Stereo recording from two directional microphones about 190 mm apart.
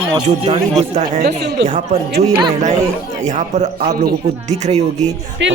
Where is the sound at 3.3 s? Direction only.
40° right (ahead or behind).